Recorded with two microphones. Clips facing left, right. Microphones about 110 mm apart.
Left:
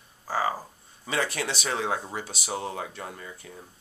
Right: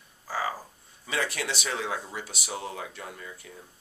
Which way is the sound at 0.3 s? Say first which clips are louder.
Left 4 dB; 30° left (ahead or behind).